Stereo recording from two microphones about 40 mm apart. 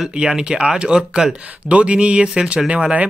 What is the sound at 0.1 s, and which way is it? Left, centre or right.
Speech, right.